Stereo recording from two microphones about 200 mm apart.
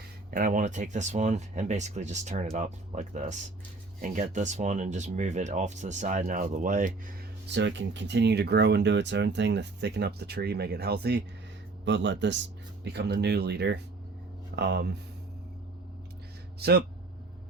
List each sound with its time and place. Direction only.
0.3 s speech: 45° right (ahead or behind)
7.4 s speech: 60° right (ahead or behind)
11.9 s speech: 60° right (ahead or behind)
16.6 s speech: 55° right (ahead or behind)